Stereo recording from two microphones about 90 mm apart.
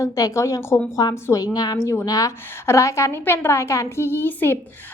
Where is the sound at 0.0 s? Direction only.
35° left (ahead or behind).